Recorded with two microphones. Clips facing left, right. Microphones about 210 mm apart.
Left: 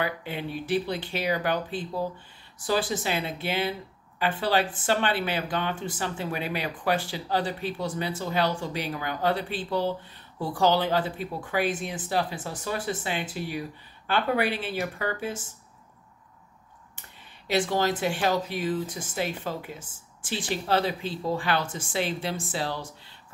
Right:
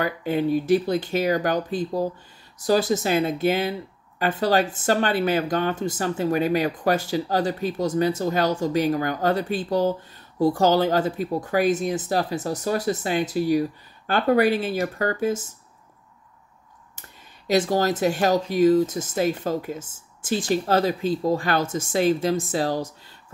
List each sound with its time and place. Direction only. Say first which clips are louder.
0.0 s speech: right 8 dB; 45° right (ahead or behind)
17.5 s speech: right 4 dB; 40° right (ahead or behind)